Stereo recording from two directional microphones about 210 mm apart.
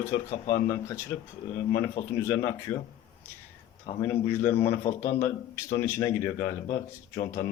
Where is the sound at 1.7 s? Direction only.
15° left (ahead or behind).